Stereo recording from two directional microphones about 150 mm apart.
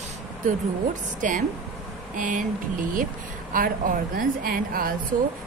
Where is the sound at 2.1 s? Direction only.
60° right (ahead or behind).